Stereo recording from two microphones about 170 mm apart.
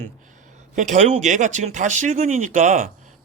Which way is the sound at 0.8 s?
45° right (ahead or behind).